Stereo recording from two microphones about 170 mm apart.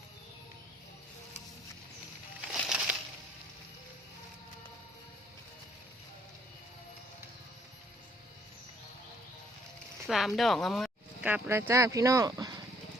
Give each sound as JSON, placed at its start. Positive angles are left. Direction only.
{"t": 2.5, "sound": "a sound", "side_deg": -5}
{"t": 10.1, "sound": "speech", "side_deg": 0}
{"t": 11.3, "sound": "speech", "side_deg": -10}